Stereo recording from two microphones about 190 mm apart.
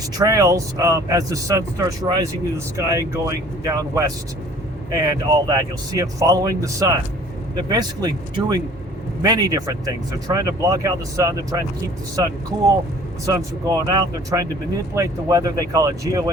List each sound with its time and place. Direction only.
0.2 s speech: 20° right (ahead or behind)